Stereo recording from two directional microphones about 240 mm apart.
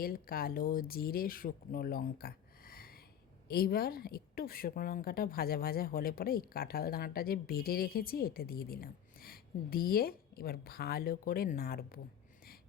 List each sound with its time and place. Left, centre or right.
0.0 s speech: left